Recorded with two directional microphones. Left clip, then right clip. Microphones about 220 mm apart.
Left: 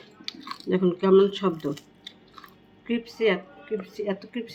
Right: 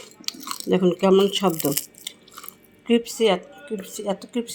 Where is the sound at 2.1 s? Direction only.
25° right (ahead or behind).